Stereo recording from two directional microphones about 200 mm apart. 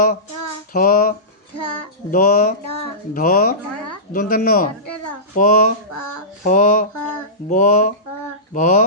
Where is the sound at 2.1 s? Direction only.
45° left (ahead or behind).